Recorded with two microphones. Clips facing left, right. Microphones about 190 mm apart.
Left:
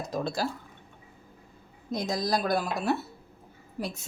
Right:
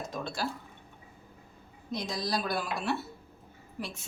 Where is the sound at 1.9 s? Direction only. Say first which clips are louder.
Left 5 dB; 45° left (ahead or behind).